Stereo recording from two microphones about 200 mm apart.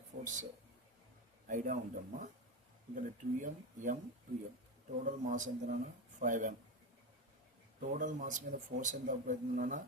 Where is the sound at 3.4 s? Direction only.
40° right (ahead or behind).